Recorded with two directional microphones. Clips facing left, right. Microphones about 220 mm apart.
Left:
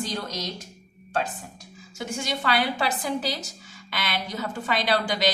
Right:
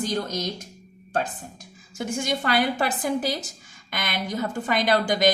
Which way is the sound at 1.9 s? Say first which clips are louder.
Right 4 dB; 50° right (ahead or behind).